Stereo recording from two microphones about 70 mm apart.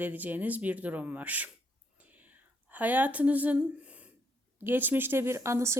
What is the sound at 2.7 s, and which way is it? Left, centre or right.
Speech, right.